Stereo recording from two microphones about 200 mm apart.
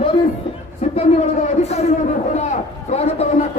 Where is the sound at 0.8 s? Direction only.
35° left (ahead or behind).